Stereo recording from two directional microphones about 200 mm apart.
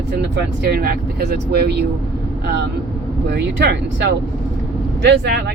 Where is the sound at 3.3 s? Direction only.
55° right (ahead or behind).